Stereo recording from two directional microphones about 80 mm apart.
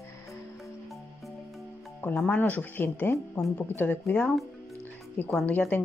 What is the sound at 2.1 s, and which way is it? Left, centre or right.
Speech, centre.